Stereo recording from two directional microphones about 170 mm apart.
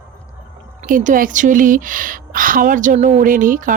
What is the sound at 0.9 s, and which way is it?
Speech, 55° right (ahead or behind).